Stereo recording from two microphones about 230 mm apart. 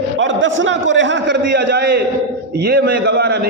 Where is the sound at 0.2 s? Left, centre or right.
Right.